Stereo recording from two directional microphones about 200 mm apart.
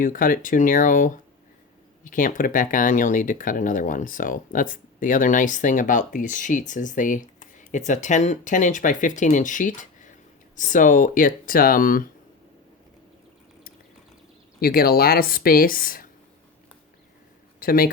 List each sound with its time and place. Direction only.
0.0 s speech: 45° left (ahead or behind)
14.6 s speech: 50° left (ahead or behind)
17.6 s speech: 45° left (ahead or behind)